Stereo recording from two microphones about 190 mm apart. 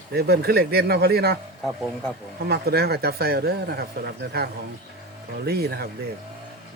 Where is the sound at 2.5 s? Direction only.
55° right (ahead or behind).